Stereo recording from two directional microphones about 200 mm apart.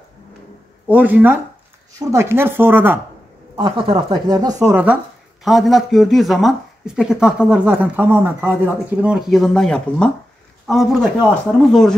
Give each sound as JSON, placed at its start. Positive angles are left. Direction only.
{"t": 0.8, "sound": "speech", "side_deg": -10}
{"t": 3.5, "sound": "speech", "side_deg": -25}
{"t": 5.4, "sound": "speech", "side_deg": 0}